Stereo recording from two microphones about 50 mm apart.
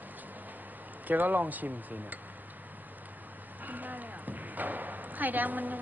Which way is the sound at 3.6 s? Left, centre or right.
Right.